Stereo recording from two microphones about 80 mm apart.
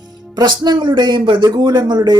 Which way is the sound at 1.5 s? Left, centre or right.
Right.